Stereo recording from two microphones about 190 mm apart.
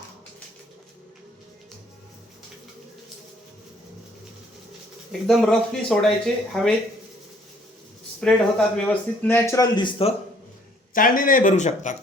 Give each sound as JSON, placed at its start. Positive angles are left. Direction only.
{"t": 5.2, "sound": "speech", "side_deg": 5}
{"t": 8.2, "sound": "a man's voice", "side_deg": 5}
{"t": 10.9, "sound": "speech", "side_deg": 45}